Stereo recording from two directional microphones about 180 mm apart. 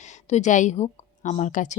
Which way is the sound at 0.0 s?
40° left (ahead or behind).